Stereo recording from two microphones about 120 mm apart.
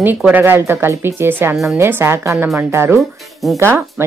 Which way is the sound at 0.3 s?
15° right (ahead or behind).